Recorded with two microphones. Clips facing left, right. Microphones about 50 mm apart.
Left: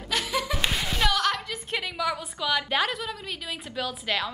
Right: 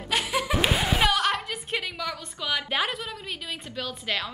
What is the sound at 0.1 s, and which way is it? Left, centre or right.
Laughter, right.